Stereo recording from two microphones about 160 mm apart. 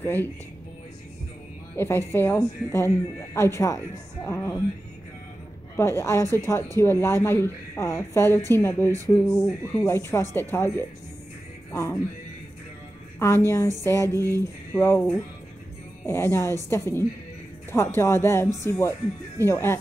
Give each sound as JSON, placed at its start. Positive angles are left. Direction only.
{"t": 0.0, "sound": "speech", "side_deg": 15}
{"t": 1.8, "sound": "speech", "side_deg": 15}
{"t": 5.8, "sound": "speech", "side_deg": 15}
{"t": 13.5, "sound": "speech", "side_deg": 15}